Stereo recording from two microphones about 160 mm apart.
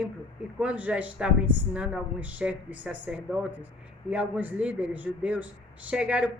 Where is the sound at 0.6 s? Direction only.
10° right (ahead or behind).